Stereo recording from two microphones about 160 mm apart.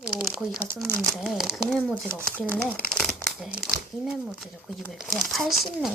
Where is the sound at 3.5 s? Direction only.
5° right (ahead or behind).